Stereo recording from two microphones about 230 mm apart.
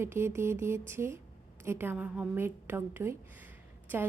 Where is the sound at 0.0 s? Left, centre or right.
Centre.